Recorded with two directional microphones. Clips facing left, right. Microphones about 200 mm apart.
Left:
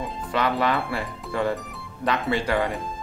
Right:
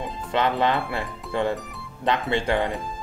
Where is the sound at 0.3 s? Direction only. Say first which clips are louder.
Right 1 dB; 20° right (ahead or behind).